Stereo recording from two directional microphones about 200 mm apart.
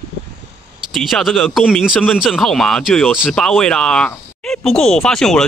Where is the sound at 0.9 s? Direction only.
Centre (ahead or behind).